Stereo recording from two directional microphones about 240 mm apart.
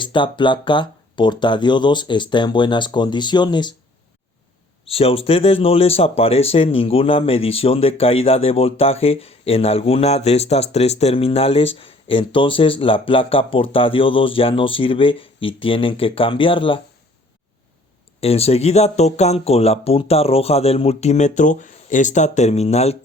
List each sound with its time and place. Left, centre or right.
0.0 s speech: centre
4.9 s speech: left
18.2 s speech: left